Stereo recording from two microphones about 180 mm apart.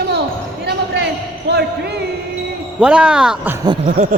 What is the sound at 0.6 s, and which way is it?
Basketball bounce, 65° right (ahead or behind).